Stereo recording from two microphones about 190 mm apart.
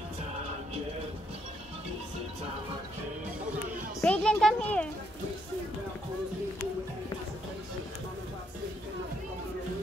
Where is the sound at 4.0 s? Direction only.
5° left (ahead or behind).